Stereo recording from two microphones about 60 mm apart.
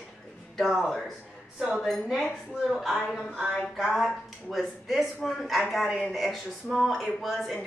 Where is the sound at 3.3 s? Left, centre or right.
Centre.